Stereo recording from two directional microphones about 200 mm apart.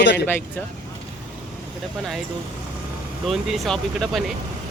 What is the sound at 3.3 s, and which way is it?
Speech, centre (ahead or behind).